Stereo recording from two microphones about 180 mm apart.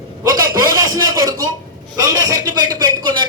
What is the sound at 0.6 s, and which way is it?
A man's voice, 20° right (ahead or behind).